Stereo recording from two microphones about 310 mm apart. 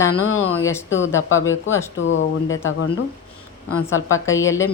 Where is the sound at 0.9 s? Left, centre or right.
Left.